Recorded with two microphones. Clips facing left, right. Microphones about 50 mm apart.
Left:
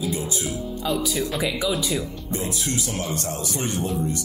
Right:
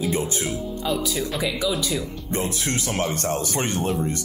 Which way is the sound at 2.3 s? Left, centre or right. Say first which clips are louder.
Right 2 dB; right.